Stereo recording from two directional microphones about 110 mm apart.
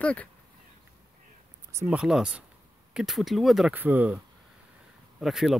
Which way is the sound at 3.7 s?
15° right (ahead or behind).